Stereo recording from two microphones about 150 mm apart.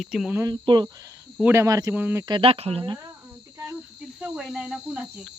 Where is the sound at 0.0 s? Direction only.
5° right (ahead or behind).